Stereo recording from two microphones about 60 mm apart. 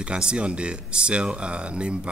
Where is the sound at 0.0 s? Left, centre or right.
Centre.